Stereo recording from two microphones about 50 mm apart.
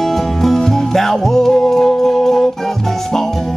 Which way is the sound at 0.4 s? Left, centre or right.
Centre.